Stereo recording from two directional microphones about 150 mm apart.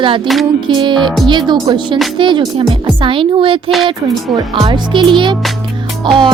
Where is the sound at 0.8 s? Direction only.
30° right (ahead or behind).